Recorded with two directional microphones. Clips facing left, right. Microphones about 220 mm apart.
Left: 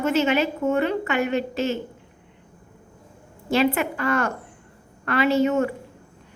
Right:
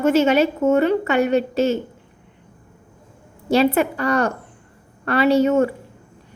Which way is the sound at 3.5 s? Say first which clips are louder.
Right 4 dB; 35° right (ahead or behind).